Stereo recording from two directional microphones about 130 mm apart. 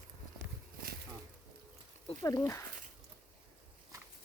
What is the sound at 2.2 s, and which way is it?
Speech, 25° left (ahead or behind).